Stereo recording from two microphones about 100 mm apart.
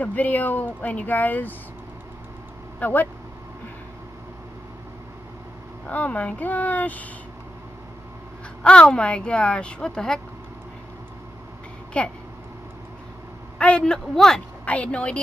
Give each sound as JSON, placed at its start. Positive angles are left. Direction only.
{"t": 0.0, "sound": "speech", "side_deg": 15}
{"t": 2.8, "sound": "speech", "side_deg": 15}
{"t": 5.9, "sound": "speech", "side_deg": 15}
{"t": 8.6, "sound": "speech", "side_deg": 10}
{"t": 11.9, "sound": "speech", "side_deg": 10}
{"t": 13.6, "sound": "speech", "side_deg": 10}